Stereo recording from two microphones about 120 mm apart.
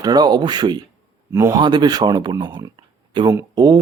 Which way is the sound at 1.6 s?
40° right (ahead or behind).